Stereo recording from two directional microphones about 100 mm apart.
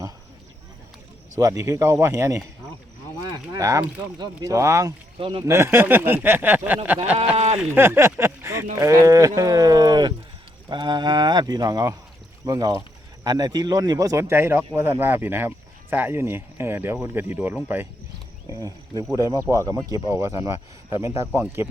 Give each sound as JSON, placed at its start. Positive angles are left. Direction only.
{"t": 1.4, "sound": "speech", "side_deg": -35}
{"t": 3.2, "sound": "a sound", "side_deg": -40}
{"t": 4.2, "sound": "speech", "side_deg": -35}
{"t": 7.8, "sound": "speech", "side_deg": -25}
{"t": 18.4, "sound": "speech", "side_deg": -40}